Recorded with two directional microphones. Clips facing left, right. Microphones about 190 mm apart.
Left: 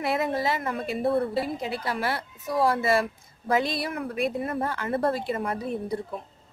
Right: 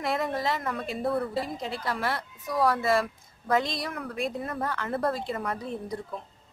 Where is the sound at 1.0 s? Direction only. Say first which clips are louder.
Left 4 dB; 25° left (ahead or behind).